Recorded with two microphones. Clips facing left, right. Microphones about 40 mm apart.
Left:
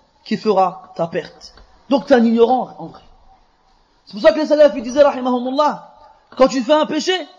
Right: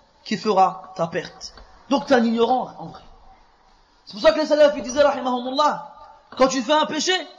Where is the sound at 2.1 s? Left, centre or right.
Left.